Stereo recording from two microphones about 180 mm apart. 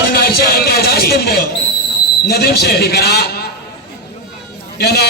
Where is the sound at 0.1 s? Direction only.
60° left (ahead or behind).